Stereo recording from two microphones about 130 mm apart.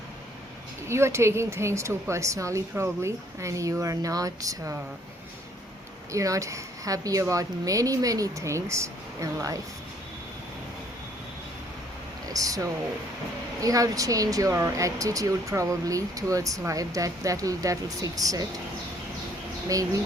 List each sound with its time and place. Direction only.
0.9 s speech: 20° right (ahead or behind)
6.1 s speech: 25° right (ahead or behind)
12.3 s speech: 25° right (ahead or behind)
19.6 s speech: 25° right (ahead or behind)